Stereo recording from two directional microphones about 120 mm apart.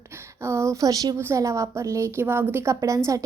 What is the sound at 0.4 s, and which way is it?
A woman's voice, 25° right (ahead or behind).